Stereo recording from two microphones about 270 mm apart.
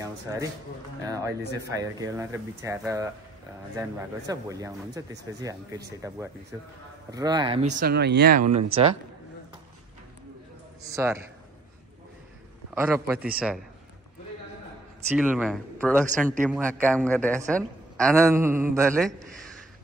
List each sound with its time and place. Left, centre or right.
0.0 s speech: centre
4.3 s speech: centre
7.8 s speech: right
10.9 s speech: centre
12.7 s speech: centre
15.0 s speech: centre
16.3 s speech: centre
16.6 s a woman's voice: centre
18.2 s speech: centre